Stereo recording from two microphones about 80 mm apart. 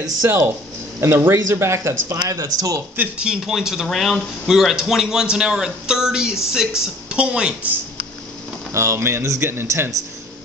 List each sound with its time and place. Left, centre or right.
0.2 s speech: right
2.4 s a man's voice: right
3.0 s speech: centre
8.7 s speech: right